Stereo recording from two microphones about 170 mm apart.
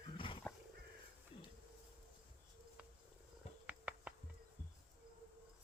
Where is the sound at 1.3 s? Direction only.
35° left (ahead or behind).